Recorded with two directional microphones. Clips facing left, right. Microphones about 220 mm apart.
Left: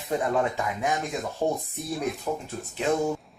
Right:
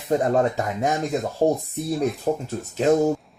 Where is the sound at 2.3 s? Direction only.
40° right (ahead or behind).